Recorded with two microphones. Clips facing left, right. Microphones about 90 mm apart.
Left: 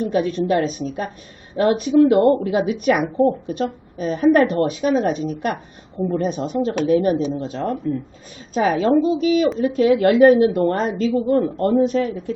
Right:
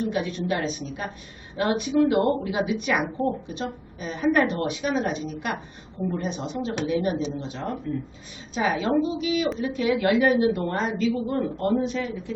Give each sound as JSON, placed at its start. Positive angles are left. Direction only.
{"t": 0.1, "sound": "a woman's voice", "side_deg": 40}